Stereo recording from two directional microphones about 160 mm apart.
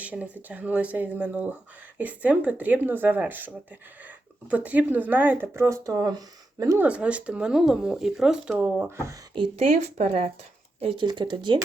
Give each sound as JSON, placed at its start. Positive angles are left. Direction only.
{"t": 0.0, "sound": "speech", "side_deg": -10}
{"t": 6.8, "sound": "speech", "side_deg": -10}
{"t": 9.3, "sound": "speech", "side_deg": -35}